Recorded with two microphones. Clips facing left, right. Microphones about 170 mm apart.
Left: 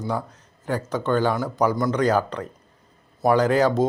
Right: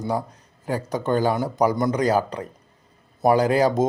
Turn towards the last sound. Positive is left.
turn(degrees=-10)  # may be behind; listen again after turning